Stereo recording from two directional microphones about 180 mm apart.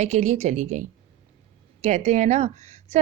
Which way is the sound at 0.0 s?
40° right (ahead or behind).